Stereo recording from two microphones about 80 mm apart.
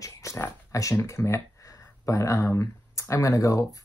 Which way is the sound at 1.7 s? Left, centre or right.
Left.